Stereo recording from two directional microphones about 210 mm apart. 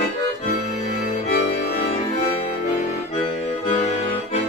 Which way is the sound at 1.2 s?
40° left (ahead or behind).